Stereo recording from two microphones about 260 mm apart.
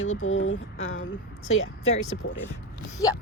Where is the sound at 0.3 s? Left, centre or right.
Left.